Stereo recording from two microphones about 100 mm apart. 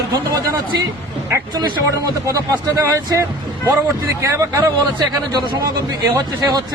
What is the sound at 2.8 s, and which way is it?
Speech, 35° right (ahead or behind).